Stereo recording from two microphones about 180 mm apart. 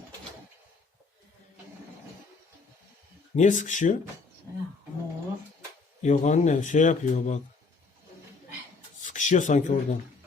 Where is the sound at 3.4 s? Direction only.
45° left (ahead or behind).